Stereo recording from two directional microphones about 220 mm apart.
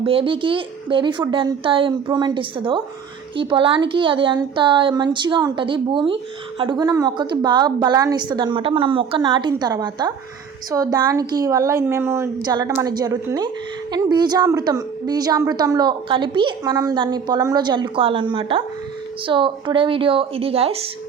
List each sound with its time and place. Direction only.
0.0 s a woman's voice: 25° right (ahead or behind)